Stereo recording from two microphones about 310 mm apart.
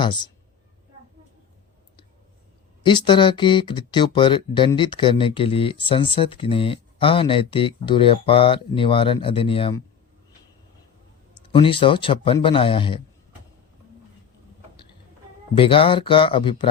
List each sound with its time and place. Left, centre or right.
0.0 s speech: centre
2.8 s speech: centre
11.5 s speech: centre
15.5 s speech: centre